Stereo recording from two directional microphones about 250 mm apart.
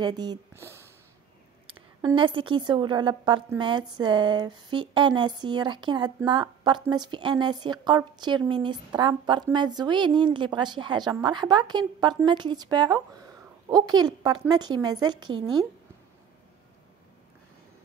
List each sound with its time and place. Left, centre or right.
0.0 s a woman's voice: centre